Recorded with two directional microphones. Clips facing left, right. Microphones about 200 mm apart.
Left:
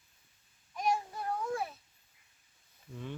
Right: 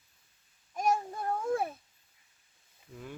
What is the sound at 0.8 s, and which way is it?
Child singing, 50° right (ahead or behind).